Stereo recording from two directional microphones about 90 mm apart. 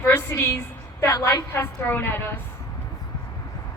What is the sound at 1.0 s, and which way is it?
Speech, 35° left (ahead or behind).